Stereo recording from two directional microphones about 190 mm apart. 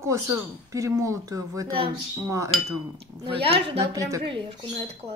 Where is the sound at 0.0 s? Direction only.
15° right (ahead or behind).